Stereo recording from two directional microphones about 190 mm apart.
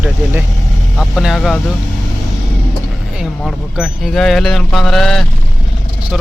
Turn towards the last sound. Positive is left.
turn(degrees=0)  # may be behind; listen again after turning